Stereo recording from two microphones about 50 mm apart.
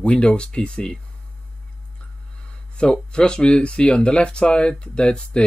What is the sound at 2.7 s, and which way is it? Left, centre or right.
Speech, centre.